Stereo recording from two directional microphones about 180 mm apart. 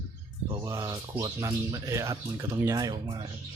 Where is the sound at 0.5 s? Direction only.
20° right (ahead or behind).